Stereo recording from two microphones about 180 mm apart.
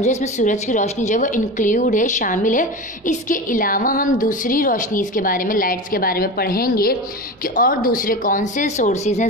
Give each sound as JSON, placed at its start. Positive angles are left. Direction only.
{"t": 0.0, "sound": "a woman's voice", "side_deg": 40}